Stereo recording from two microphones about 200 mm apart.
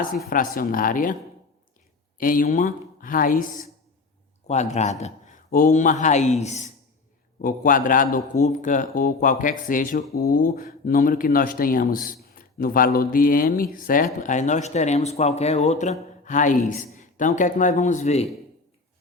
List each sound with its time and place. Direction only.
0.3 s speech: 45° left (ahead or behind)
2.1 s speech: 45° left (ahead or behind)